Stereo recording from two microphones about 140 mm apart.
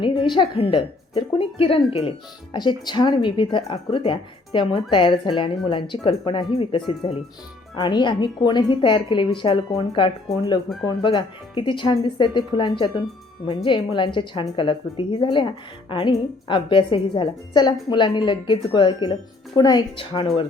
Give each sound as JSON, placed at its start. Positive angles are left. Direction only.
{"t": 0.0, "sound": "a woman's voice", "side_deg": 35}
{"t": 20.1, "sound": "a woman's voice", "side_deg": 40}